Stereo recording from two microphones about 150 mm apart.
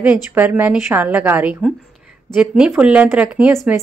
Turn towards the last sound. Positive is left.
turn(degrees=-15)  # may be behind; listen again after turning